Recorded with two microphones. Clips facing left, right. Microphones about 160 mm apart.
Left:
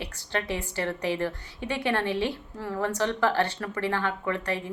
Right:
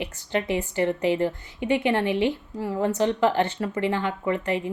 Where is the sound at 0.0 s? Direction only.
20° right (ahead or behind).